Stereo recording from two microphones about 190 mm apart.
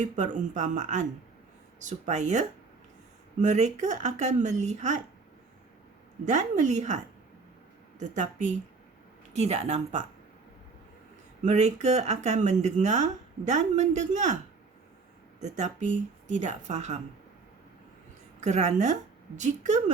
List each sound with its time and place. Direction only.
0.0 s speech: 40° right (ahead or behind)
6.2 s speech: 40° right (ahead or behind)
11.4 s speech: 40° right (ahead or behind)
15.4 s speech: 40° right (ahead or behind)
18.3 s speech: 35° right (ahead or behind)